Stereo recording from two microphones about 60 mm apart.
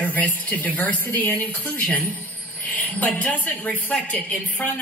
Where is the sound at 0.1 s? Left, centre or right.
Left.